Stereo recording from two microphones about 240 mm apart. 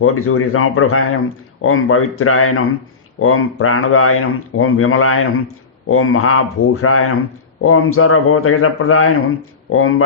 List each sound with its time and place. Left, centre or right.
0.0 s speech: left